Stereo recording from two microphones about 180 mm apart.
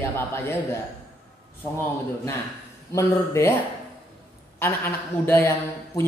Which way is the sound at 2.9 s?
15° left (ahead or behind).